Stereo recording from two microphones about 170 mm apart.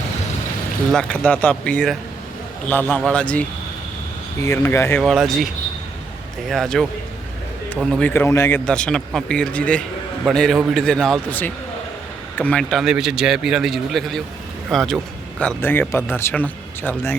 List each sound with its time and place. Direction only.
0.9 s speech: 5° left (ahead or behind)
4.4 s speech: 15° left (ahead or behind)
5.0 s a man's voice: centre (ahead or behind)
6.5 s a man's voice: centre (ahead or behind)